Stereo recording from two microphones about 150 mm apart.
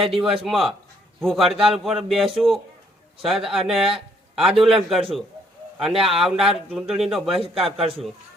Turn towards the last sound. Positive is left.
turn(degrees=0)  # may be behind; listen again after turning